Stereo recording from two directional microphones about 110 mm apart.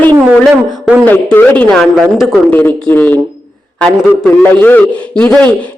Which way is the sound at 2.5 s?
15° left (ahead or behind).